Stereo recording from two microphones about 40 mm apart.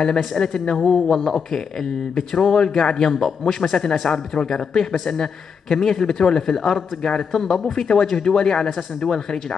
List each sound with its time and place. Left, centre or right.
0.4 s speech: centre
4.1 s speech: centre
7.4 s speech: centre